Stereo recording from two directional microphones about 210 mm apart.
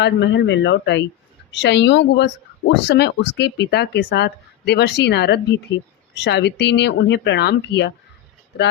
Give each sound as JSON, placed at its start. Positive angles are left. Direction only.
{"t": 0.0, "sound": "speech", "side_deg": 55}